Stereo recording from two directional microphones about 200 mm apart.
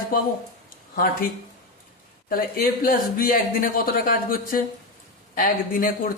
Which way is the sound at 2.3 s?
45° left (ahead or behind).